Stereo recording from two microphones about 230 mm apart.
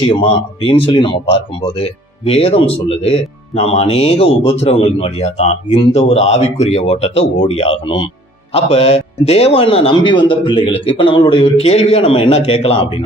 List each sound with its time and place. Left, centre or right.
0.1 s speech: left